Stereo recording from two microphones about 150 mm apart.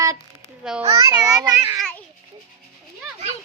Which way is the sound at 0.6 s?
5° right (ahead or behind).